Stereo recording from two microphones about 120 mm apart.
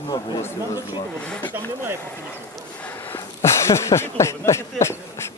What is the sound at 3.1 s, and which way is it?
Speech, 25° left (ahead or behind).